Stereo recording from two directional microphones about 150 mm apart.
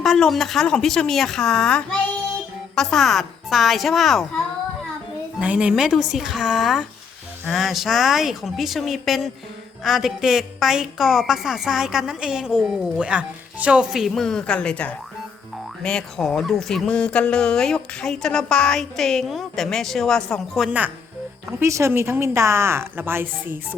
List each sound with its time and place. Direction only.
0.0 s a woman's voice: centre (ahead or behind)
5.4 s a woman's voice: 10° right (ahead or behind)
20.7 s speech: 10° right (ahead or behind)